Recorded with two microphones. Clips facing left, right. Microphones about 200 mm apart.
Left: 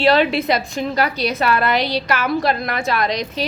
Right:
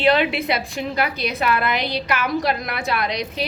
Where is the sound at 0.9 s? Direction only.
35° left (ahead or behind).